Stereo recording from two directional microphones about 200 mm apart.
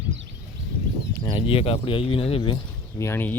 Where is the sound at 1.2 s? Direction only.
25° left (ahead or behind).